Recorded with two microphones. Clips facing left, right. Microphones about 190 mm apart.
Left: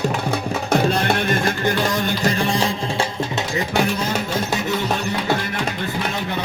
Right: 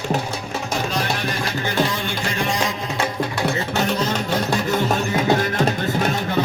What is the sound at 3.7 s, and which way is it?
Music, 10° left (ahead or behind).